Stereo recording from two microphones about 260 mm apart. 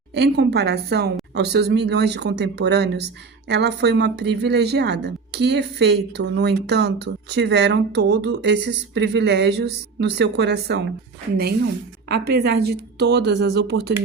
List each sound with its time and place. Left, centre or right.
0.1 s speech: right
12.0 s speech: right